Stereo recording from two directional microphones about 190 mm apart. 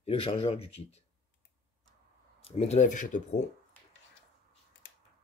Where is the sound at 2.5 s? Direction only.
35° left (ahead or behind).